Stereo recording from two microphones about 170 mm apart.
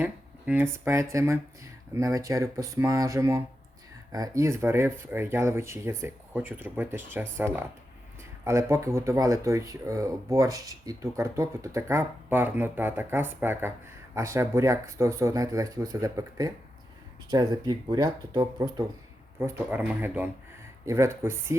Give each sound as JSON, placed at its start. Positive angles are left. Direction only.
{"t": 0.0, "sound": "speech", "side_deg": -10}